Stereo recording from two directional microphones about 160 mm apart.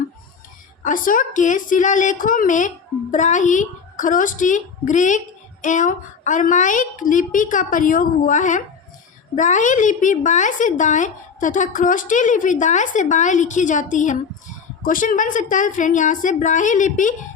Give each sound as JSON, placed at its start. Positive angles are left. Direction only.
{"t": 0.9, "sound": "a woman's voice", "side_deg": 55}